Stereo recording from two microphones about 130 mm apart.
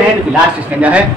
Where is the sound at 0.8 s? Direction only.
10° right (ahead or behind).